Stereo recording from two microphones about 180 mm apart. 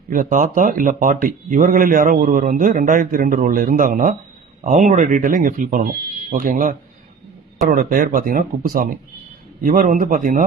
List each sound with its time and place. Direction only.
0.1 s speech: 45° right (ahead or behind)